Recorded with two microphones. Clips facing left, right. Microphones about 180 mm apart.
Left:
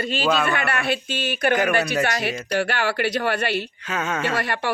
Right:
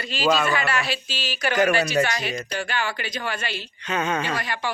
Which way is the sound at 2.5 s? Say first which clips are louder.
Left 5 dB; 65° left (ahead or behind).